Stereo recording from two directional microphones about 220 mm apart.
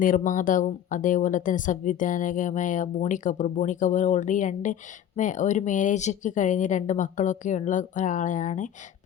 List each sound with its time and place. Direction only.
0.0 s speech: 40° left (ahead or behind)